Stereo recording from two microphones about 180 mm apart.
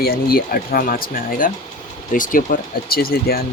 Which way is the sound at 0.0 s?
55° left (ahead or behind).